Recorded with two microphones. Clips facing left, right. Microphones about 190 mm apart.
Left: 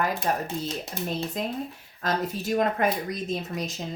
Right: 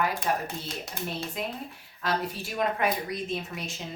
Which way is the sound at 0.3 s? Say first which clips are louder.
Left 3 dB; 45° left (ahead or behind).